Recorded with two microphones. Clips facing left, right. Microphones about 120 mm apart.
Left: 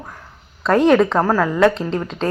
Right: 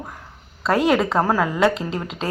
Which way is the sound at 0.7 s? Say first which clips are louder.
Left 5 dB; 10° right (ahead or behind).